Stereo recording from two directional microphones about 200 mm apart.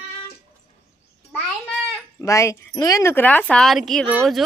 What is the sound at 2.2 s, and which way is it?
Speech, 15° left (ahead or behind).